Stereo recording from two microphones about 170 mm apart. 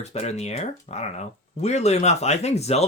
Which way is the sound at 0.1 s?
40° left (ahead or behind).